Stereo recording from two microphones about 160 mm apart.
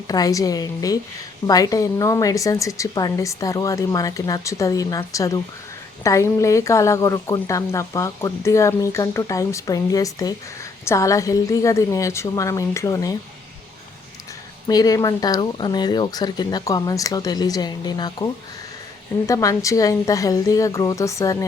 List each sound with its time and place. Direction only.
0.1 s speech: 20° left (ahead or behind)
14.7 s speech: 25° left (ahead or behind)
19.3 s speech: 20° left (ahead or behind)